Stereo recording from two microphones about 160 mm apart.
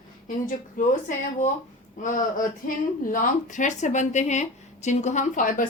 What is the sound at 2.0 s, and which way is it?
Speech, 55° left (ahead or behind).